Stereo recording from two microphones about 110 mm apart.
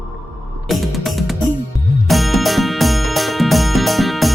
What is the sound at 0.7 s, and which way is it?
Music, centre (ahead or behind).